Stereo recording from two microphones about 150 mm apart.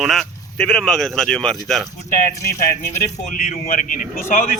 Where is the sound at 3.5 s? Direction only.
60° left (ahead or behind).